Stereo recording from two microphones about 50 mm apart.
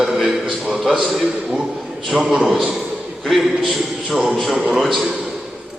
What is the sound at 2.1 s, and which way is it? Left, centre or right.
A man's voice, centre.